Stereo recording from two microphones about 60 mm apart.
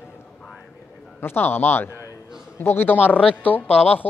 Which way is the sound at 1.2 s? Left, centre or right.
Left.